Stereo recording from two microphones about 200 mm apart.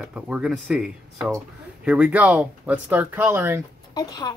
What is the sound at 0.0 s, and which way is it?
Speech, 5° right (ahead or behind).